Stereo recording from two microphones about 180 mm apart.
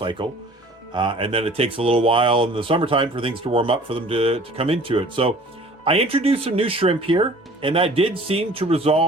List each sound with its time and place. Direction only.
0.0 s speech: 25° right (ahead or behind)